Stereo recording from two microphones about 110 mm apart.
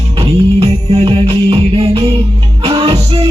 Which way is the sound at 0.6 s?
60° right (ahead or behind).